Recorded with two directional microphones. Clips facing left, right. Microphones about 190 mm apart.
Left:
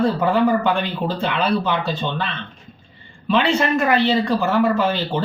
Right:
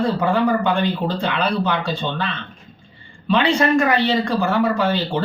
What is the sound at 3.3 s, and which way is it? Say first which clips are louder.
Speech: right 1 dB; 5° left (ahead or behind).